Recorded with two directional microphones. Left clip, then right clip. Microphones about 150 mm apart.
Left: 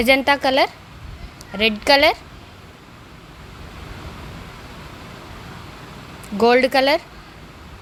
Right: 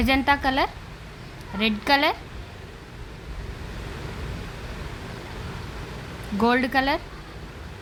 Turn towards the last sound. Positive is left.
turn(degrees=25)  # may be behind; listen again after turning